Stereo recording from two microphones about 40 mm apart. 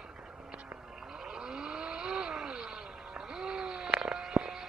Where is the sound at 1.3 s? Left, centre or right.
Right.